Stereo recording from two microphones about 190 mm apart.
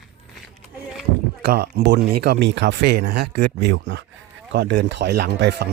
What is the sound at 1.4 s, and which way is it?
Speech, 55° right (ahead or behind).